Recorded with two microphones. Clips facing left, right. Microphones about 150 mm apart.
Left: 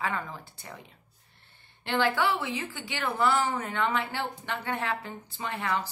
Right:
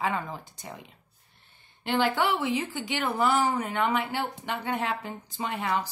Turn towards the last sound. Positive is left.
turn(degrees=-15)  # may be behind; listen again after turning